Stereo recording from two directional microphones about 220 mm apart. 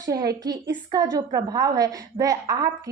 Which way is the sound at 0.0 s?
15° right (ahead or behind).